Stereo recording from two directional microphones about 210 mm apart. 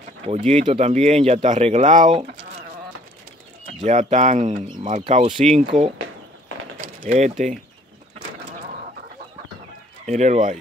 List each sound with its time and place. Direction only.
0.3 s speech: 30° right (ahead or behind)
3.8 s speech: 35° right (ahead or behind)
10.0 s speech: 35° right (ahead or behind)